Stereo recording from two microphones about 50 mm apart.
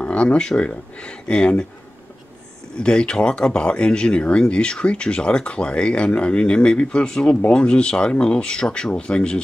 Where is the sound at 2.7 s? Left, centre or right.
Centre.